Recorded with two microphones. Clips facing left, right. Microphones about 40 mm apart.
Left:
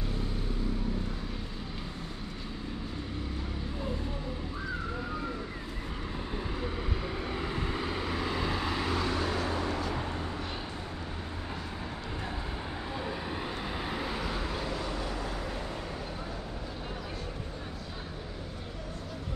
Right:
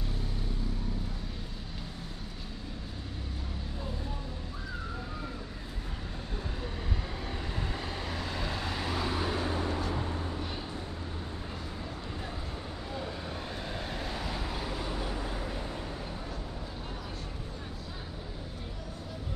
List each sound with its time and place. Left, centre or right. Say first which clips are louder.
7.2 s vehicle: left 3 dB; centre
13.7 s vehicle: left 2 dB; centre
14.8 s vehicle: left 1 dB; centre